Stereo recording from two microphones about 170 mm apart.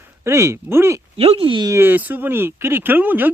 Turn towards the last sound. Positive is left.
turn(degrees=-10)  # may be behind; listen again after turning